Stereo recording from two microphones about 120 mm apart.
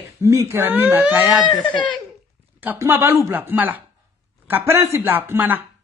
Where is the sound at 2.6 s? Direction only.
20° right (ahead or behind).